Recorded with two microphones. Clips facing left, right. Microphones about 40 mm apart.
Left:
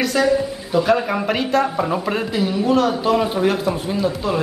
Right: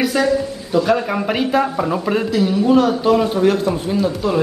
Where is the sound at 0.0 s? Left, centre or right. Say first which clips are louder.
Right 1 dB; centre.